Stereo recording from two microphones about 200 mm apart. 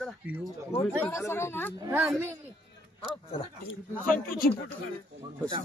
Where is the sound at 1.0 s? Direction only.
10° left (ahead or behind).